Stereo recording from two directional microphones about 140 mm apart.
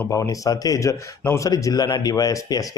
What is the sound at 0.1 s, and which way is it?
Speech, 25° left (ahead or behind).